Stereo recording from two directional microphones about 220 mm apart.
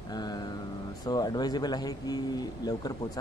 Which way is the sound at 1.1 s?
20° left (ahead or behind).